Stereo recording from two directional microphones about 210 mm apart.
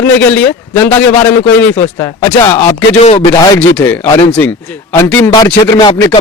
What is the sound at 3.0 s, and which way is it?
Speech, 30° left (ahead or behind).